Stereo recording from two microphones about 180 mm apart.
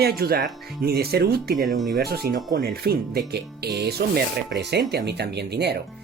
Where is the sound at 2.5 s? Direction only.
55° right (ahead or behind).